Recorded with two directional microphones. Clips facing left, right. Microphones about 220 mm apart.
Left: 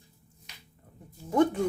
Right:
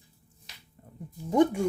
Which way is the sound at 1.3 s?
15° right (ahead or behind).